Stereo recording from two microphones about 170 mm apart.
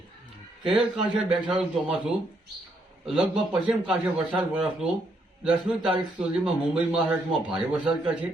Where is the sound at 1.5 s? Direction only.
5° right (ahead or behind).